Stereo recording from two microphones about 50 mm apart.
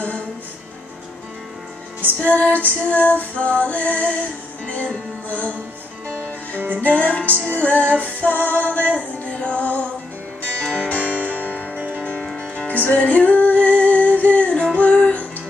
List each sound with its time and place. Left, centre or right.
2.1 s female singing: left
5.3 s female singing: left
6.8 s female singing: left
8.0 s music: left
11.0 s music: left